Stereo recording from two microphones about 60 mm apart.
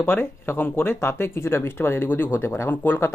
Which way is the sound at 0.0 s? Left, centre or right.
Left.